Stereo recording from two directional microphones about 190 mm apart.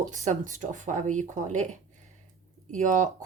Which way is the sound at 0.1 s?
40° right (ahead or behind).